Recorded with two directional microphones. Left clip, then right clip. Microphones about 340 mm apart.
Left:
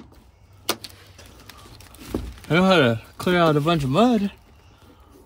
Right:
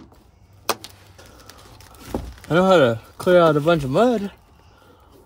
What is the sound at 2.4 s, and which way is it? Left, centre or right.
Speech, left.